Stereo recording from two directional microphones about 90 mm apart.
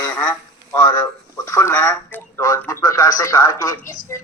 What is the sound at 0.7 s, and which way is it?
A woman's voice, 45° left (ahead or behind).